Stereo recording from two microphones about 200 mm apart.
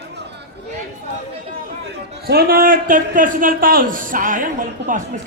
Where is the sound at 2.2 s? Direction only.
50° right (ahead or behind).